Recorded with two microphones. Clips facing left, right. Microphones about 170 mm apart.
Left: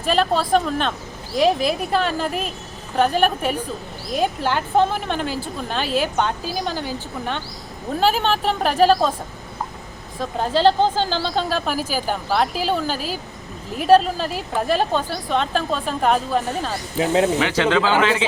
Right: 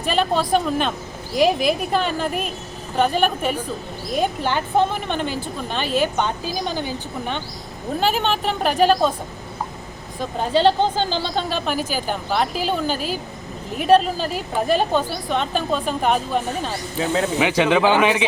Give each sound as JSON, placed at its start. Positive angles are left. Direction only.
{"t": 0.0, "sound": "a woman's voice", "side_deg": 0}
{"t": 10.2, "sound": "a woman's voice", "side_deg": 0}
{"t": 17.0, "sound": "speech", "side_deg": 20}
{"t": 17.4, "sound": "speech", "side_deg": -15}